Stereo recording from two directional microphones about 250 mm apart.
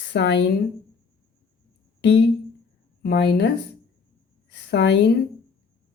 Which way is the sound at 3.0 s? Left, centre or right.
Left.